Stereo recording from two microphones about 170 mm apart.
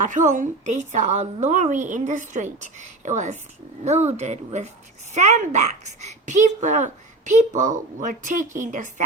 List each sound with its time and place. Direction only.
0.0 s a child's voice: 45° right (ahead or behind)